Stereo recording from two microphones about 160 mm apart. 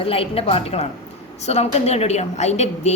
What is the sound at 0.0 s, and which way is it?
A woman's voice, 35° left (ahead or behind).